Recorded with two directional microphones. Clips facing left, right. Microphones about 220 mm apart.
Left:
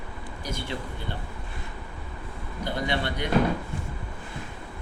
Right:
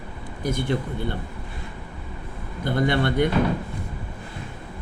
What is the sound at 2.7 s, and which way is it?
Speech, 50° right (ahead or behind).